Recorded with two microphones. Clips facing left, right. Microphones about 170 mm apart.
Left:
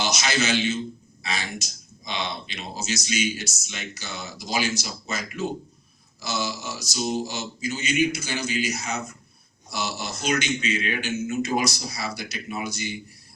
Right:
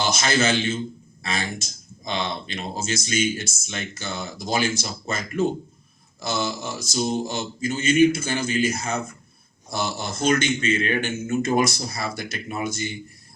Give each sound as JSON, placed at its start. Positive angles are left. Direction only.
{"t": 0.0, "sound": "speech", "side_deg": -50}